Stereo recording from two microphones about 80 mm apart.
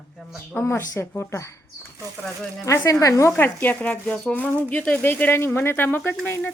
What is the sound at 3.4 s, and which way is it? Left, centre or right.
Speech, left.